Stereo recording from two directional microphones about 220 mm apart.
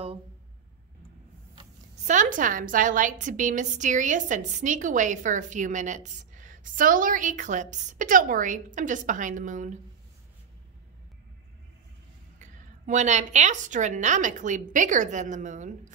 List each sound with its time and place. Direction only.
1.5 s a sound: 25° right (ahead or behind)
2.1 s a woman's voice: 35° right (ahead or behind)
12.4 s a woman's voice: 35° right (ahead or behind)